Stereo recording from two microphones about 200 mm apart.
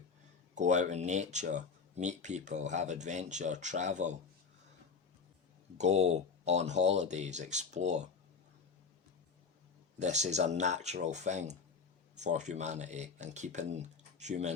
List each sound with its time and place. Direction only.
0.5 s speech: 35° right (ahead or behind)
5.7 s speech: 35° right (ahead or behind)
10.0 s speech: 35° right (ahead or behind)